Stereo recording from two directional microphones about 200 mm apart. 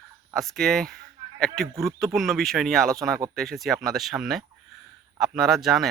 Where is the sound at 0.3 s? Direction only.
Centre (ahead or behind).